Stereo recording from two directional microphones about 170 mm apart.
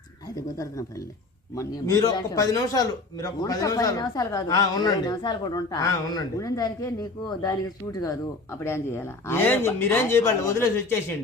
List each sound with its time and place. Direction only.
0.3 s a man's voice: 20° left (ahead or behind)